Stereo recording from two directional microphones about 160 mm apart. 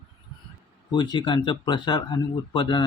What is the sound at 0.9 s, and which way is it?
Speech, 25° left (ahead or behind).